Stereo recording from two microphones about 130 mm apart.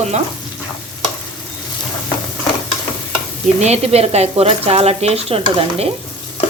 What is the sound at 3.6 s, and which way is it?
Speech, 55° right (ahead or behind).